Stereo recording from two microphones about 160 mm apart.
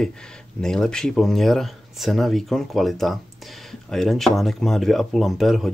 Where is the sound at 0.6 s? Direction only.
5° left (ahead or behind).